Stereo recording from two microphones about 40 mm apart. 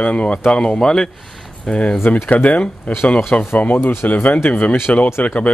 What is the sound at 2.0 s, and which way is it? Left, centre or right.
Speech, left.